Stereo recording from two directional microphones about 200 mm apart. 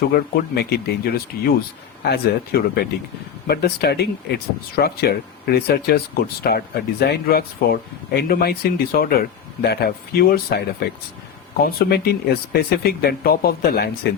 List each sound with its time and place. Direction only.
0.0 s speech: 50° left (ahead or behind)